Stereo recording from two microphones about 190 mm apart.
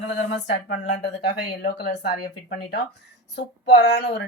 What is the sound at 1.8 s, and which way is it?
Speech, 60° left (ahead or behind).